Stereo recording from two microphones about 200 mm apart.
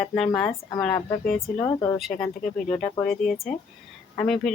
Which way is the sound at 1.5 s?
15° left (ahead or behind).